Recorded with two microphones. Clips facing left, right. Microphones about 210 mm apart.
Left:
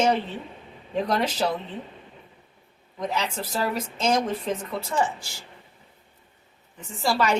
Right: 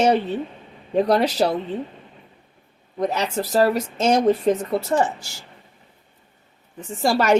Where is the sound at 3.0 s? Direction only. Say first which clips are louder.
Right 6 dB; 40° right (ahead or behind).